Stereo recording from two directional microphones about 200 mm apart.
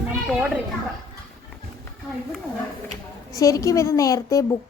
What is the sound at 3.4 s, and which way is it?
A woman's voice, 15° left (ahead or behind).